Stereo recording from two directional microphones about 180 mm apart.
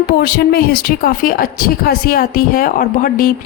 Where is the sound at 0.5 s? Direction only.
60° left (ahead or behind).